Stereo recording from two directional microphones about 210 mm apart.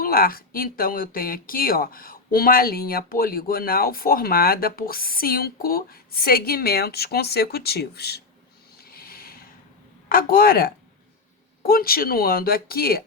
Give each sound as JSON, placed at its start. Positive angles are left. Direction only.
{"t": 0.0, "sound": "speech", "side_deg": 45}
{"t": 8.8, "sound": "a sound", "side_deg": 45}
{"t": 10.1, "sound": "speech", "side_deg": 45}